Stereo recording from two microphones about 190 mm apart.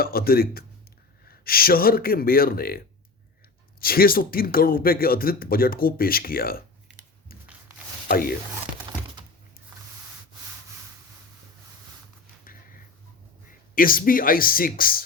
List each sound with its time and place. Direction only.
0.0 s speech: 50° left (ahead or behind)
8.0 s speech: 55° left (ahead or behind)
13.7 s speech: 50° left (ahead or behind)